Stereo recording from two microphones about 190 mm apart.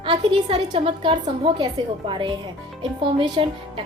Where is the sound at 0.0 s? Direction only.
25° right (ahead or behind).